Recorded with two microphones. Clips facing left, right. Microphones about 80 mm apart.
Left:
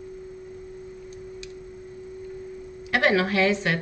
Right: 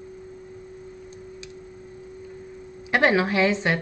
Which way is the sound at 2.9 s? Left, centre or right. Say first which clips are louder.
Right 1 dB; right.